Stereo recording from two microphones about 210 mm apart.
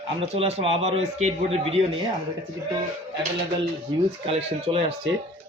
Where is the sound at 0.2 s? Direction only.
30° right (ahead or behind).